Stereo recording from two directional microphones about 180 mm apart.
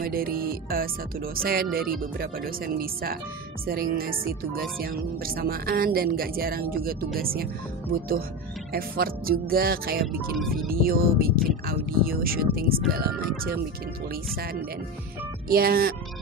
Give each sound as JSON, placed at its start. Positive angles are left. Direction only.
{"t": 0.0, "sound": "speech", "side_deg": -55}
{"t": 8.7, "sound": "speech", "side_deg": -55}
{"t": 10.3, "sound": "speech", "side_deg": 0}
{"t": 10.7, "sound": "speech", "side_deg": -55}